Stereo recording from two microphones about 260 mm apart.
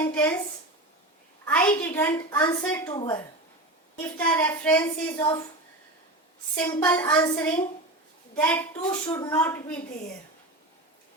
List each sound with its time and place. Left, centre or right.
0.0 s a woman's voice: centre
1.5 s a woman's voice: centre
4.2 s a woman's voice: centre
6.6 s a woman's voice: centre